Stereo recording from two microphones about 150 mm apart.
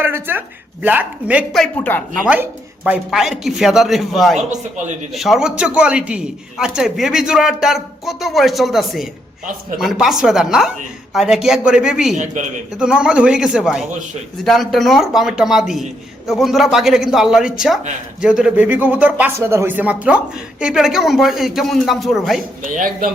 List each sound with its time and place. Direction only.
0.0 s speech: 15° right (ahead or behind)
1.5 s speech: 10° left (ahead or behind)
2.2 s speech: 10° right (ahead or behind)
4.4 s speech: 55° right (ahead or behind)
5.1 s speech: centre (ahead or behind)
12.1 s speech: 55° right (ahead or behind)
12.8 s speech: 5° right (ahead or behind)
22.6 s speech: 65° right (ahead or behind)